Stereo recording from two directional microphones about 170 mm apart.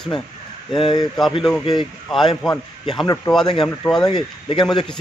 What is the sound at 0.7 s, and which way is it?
Speech, 30° left (ahead or behind).